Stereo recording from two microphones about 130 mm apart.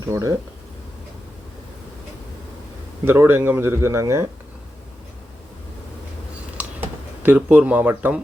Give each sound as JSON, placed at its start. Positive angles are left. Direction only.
{"t": 0.0, "sound": "speech", "side_deg": -25}
{"t": 3.0, "sound": "speech", "side_deg": -20}
{"t": 6.6, "sound": "a sound", "side_deg": -15}